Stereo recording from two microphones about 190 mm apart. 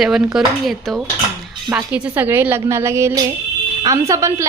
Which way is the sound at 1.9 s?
10° right (ahead or behind).